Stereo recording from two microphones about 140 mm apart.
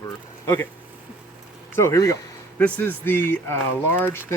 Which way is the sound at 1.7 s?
20° left (ahead or behind).